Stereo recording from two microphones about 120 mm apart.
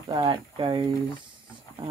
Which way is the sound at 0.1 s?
45° right (ahead or behind).